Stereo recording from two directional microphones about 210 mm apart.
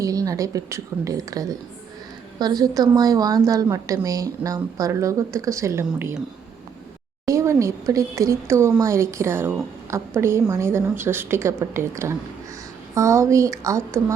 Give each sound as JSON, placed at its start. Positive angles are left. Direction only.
{"t": 0.0, "sound": "a woman's voice", "side_deg": -15}
{"t": 7.3, "sound": "a woman's voice", "side_deg": -15}